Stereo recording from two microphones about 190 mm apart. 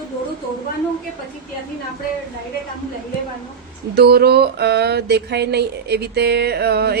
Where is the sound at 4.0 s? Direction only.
55° right (ahead or behind).